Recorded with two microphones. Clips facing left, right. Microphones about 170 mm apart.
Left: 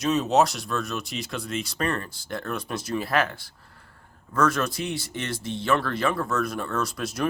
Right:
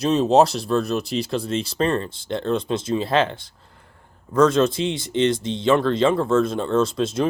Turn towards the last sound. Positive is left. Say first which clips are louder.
# right 7 dB
turn(degrees=-25)  # may be behind; listen again after turning